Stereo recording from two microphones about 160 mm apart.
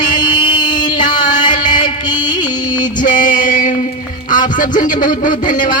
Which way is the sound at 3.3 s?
55° left (ahead or behind).